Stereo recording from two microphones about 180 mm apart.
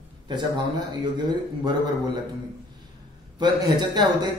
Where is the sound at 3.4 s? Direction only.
25° right (ahead or behind).